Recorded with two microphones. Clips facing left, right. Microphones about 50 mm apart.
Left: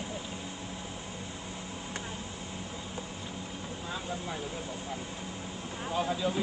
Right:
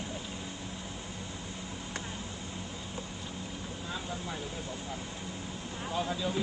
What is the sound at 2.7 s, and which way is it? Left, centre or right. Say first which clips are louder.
Vehicle: left 1 dB; centre.